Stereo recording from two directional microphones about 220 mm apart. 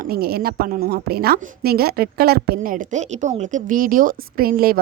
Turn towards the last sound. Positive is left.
turn(degrees=-40)  # may be behind; listen again after turning